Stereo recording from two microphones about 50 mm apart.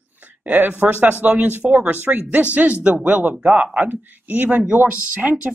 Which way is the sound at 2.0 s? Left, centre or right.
Right.